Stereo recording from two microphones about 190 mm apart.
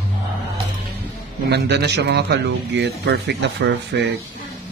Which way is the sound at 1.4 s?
60° right (ahead or behind).